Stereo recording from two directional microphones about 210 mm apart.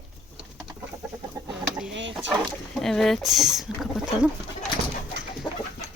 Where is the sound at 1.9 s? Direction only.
60° right (ahead or behind).